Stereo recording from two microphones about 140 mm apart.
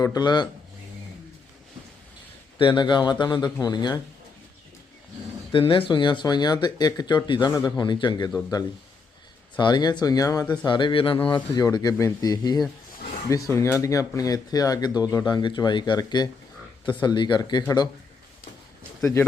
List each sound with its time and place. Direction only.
0.0 s speech: 30° left (ahead or behind)
2.6 s speech: 35° left (ahead or behind)
5.5 s speech: 35° left (ahead or behind)
9.6 s speech: 30° left (ahead or behind)